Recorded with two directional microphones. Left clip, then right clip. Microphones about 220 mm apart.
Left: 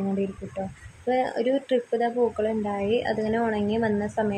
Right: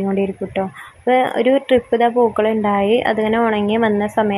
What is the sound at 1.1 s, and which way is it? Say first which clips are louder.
Speech: right 10 dB; 15° right (ahead or behind).